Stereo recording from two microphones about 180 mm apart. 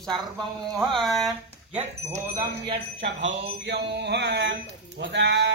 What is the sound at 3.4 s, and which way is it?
Speech, 70° right (ahead or behind).